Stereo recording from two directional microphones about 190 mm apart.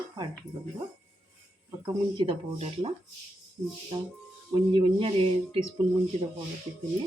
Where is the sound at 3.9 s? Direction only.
25° right (ahead or behind).